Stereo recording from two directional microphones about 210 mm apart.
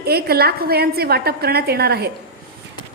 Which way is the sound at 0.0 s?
50° right (ahead or behind).